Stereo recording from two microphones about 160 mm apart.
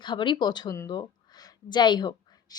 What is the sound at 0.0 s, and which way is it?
Speech, 30° left (ahead or behind).